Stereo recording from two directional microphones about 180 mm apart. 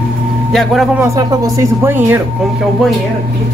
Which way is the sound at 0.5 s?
Centre (ahead or behind).